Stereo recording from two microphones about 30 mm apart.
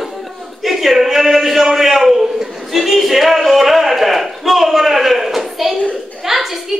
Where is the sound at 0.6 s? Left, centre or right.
Centre.